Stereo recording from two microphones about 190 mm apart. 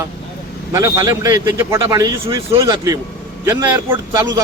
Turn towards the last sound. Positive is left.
turn(degrees=-15)  # may be behind; listen again after turning